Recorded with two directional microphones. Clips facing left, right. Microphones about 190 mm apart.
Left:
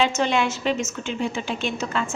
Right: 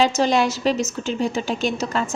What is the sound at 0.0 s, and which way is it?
A woman's voice, 35° right (ahead or behind).